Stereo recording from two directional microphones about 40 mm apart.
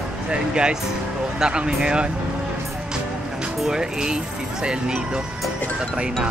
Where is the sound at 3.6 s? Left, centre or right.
Centre.